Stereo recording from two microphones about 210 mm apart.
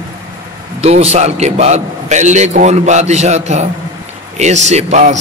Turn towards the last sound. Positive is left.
turn(degrees=-35)  # may be behind; listen again after turning